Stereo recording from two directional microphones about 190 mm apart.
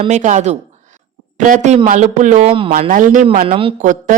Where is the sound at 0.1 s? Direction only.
40° right (ahead or behind).